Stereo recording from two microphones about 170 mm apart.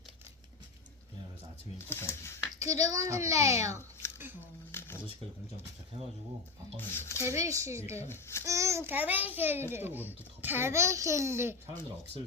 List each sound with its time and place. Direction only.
1.9 s a sound: 15° left (ahead or behind)
2.6 s speech: 20° right (ahead or behind)
4.7 s shuffling cards: 15° left (ahead or behind)
6.7 s speech: 15° left (ahead or behind)
7.3 s a child's voice: 15° right (ahead or behind)
8.0 s speech: 15° left (ahead or behind)
8.4 s a child's voice: 15° right (ahead or behind)